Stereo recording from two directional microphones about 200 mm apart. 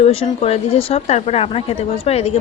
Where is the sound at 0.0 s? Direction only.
30° left (ahead or behind).